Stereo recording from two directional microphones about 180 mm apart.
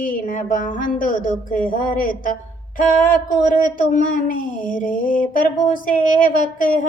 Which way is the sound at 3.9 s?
50° left (ahead or behind).